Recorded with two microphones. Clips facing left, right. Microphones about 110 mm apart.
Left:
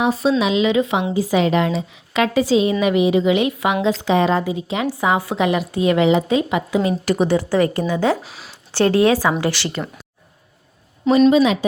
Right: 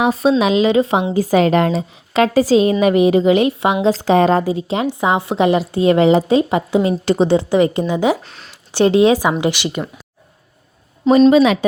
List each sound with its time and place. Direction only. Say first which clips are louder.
0.0 s a woman's voice: right 3 dB; 55° right (ahead or behind); by 1.0 s 35° right (ahead or behind)
1.1 s a woman's voice: right 4 dB; 50° right (ahead or behind)
4.9 s a woman's voice: even; 20° right (ahead or behind)
8.2 s speech: left 1 dB; 5° left (ahead or behind)
8.7 s a woman's voice: right 3 dB; 20° right (ahead or behind)
11.3 s speech: right 3 dB; 65° right (ahead or behind)